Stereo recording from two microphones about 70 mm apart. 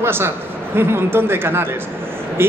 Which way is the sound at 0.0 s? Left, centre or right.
Right.